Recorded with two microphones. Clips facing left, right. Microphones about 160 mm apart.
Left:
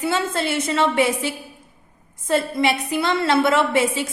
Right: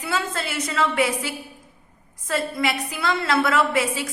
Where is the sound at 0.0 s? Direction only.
25° left (ahead or behind).